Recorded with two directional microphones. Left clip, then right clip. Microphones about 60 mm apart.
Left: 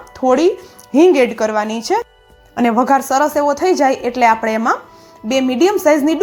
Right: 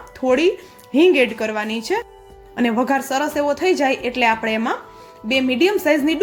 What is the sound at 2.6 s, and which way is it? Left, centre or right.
Speech, left.